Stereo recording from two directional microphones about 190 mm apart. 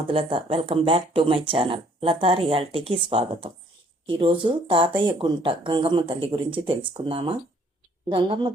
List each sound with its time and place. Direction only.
0.1 s speech: 30° right (ahead or behind)